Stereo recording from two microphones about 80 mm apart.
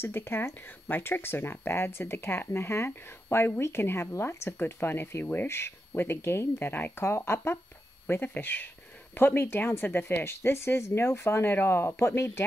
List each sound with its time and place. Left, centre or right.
0.0 s speech: left